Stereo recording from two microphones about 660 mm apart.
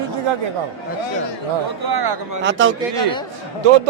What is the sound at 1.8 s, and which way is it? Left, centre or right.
Speech, right.